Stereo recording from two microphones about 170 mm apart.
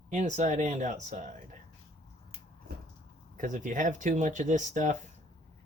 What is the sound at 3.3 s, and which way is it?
Speech, 50° right (ahead or behind).